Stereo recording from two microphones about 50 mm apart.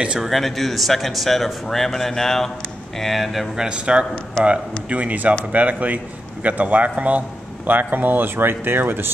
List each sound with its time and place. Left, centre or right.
0.2 s speech: centre
3.5 s a man's voice: centre; by 9.1 s right